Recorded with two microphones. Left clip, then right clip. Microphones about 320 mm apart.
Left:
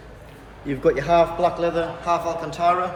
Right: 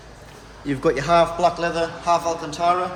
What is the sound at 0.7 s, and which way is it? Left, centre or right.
A man's voice, right.